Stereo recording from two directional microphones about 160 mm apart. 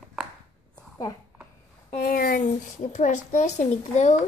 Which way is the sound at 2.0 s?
65° left (ahead or behind).